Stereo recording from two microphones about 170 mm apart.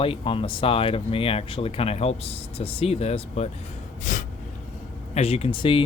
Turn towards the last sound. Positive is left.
turn(degrees=30)  # may be behind; listen again after turning